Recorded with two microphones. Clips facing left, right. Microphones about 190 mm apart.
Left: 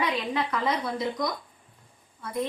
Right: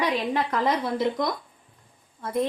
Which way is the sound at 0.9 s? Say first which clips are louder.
Right 4 dB; 60° right (ahead or behind).